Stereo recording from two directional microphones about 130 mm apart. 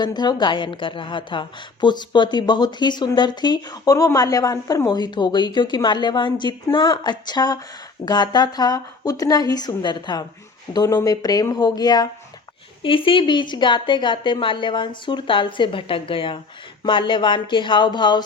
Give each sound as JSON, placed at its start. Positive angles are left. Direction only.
{"t": 0.0, "sound": "a woman's voice", "side_deg": 35}
{"t": 12.8, "sound": "a woman's voice", "side_deg": 40}